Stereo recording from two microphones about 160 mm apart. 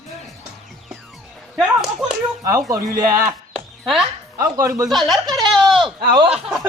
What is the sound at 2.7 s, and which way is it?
Speech, 20° right (ahead or behind).